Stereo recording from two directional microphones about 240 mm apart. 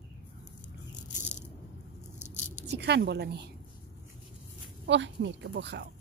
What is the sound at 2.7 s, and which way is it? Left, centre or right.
Speech, right.